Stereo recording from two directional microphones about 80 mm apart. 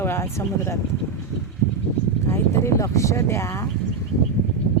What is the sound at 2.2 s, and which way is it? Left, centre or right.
Speech, left.